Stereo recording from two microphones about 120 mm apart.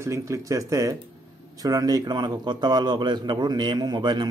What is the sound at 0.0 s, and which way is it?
A man's voice, 25° right (ahead or behind).